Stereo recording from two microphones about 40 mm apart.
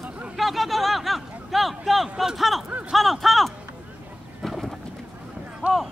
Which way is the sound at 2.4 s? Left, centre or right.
Centre.